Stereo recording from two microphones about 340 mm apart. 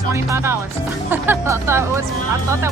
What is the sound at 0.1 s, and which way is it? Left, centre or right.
Speech, centre.